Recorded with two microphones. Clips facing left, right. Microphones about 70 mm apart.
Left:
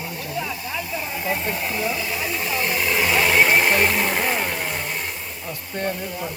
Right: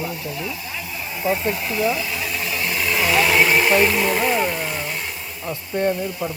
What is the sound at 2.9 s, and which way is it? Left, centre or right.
Vehicle, centre.